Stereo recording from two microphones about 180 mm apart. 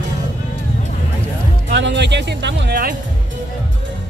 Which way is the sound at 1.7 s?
80° right.